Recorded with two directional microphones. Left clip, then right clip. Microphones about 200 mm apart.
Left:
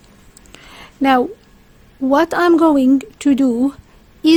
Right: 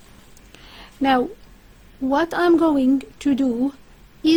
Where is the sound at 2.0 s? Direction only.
30° left (ahead or behind).